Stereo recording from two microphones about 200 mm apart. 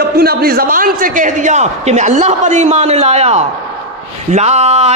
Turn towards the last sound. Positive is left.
turn(degrees=-35)  # may be behind; listen again after turning